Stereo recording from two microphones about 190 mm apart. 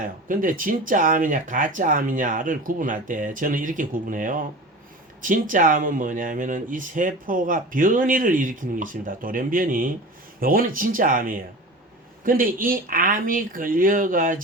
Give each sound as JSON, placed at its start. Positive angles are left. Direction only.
{"t": 0.0, "sound": "speech", "side_deg": -45}